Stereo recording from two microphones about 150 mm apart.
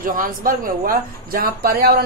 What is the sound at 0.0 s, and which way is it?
Speech, 65° right (ahead or behind).